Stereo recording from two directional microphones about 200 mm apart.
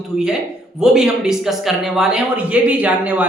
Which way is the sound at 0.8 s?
Centre (ahead or behind).